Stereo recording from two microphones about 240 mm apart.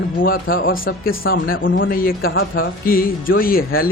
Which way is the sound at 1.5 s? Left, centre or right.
Left.